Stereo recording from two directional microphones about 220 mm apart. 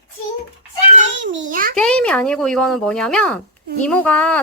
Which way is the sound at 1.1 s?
55° right (ahead or behind).